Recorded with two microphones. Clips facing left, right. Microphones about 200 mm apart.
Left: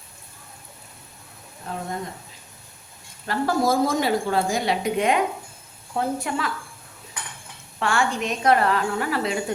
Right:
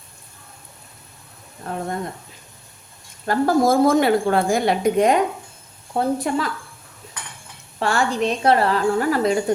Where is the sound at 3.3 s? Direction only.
50° right (ahead or behind).